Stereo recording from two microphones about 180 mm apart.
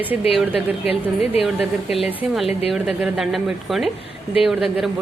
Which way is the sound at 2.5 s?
35° left (ahead or behind).